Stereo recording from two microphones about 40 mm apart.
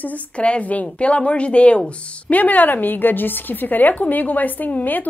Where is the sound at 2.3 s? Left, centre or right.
Left.